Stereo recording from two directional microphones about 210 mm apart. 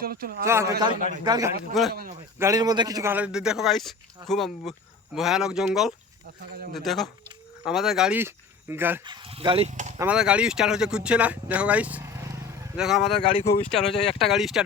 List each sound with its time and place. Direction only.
0.0 s speech: 45° right (ahead or behind)
0.4 s speech: 15° right (ahead or behind)
1.9 s speech: 45° right (ahead or behind)
2.4 s a man's voice: 15° right (ahead or behind)
9.0 s speech: 25° right (ahead or behind)
10.0 s speech: 5° right (ahead or behind)
12.7 s a man's voice: centre (ahead or behind)
13.1 s speech: 25° left (ahead or behind)
13.7 s a man's voice: centre (ahead or behind)